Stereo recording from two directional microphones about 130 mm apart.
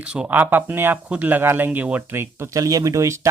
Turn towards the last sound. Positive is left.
turn(degrees=-25)  # may be behind; listen again after turning